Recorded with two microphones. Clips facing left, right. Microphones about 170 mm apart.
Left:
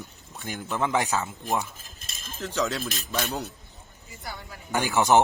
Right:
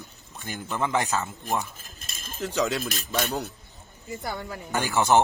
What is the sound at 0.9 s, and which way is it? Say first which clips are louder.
Speech: even; 15° left (ahead or behind).